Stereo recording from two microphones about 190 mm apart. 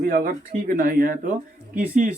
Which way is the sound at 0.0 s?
45° right (ahead or behind).